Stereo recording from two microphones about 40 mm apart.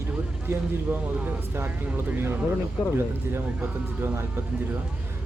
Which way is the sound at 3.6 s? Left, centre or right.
Right.